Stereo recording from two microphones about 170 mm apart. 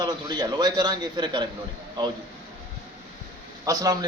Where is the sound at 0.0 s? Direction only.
25° right (ahead or behind).